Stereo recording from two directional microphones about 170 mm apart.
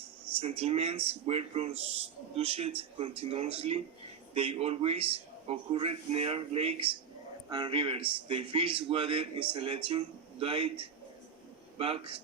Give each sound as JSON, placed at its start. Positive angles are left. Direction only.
{"t": 0.3, "sound": "a man's voice", "side_deg": -35}